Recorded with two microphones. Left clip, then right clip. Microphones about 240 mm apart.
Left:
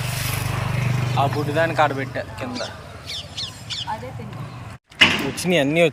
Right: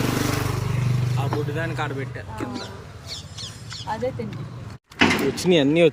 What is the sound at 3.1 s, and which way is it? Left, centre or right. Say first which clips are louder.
Bird: left 6 dB; right.